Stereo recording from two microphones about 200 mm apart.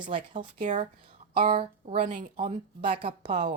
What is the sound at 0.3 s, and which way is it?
Speech, 40° right (ahead or behind).